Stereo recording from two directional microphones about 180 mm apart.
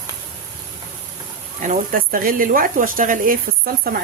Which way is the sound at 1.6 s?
50° right (ahead or behind).